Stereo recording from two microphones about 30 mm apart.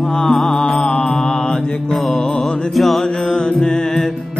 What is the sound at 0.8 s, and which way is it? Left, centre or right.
Mantra, left.